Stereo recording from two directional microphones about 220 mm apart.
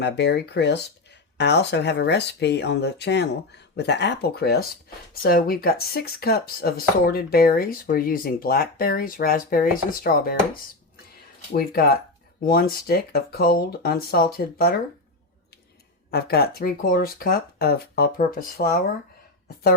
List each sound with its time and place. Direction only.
0.0 s speech: 50° left (ahead or behind)
11.5 s speech: 45° left (ahead or behind)
16.1 s speech: 45° left (ahead or behind)